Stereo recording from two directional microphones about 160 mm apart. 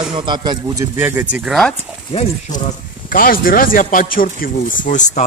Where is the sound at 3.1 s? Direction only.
65° left (ahead or behind).